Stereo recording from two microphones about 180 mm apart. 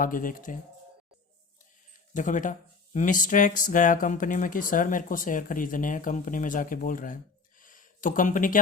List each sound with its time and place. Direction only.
0.0 s speech: 50° left (ahead or behind)
2.1 s speech: 45° left (ahead or behind)
7.6 s a sound: 50° left (ahead or behind)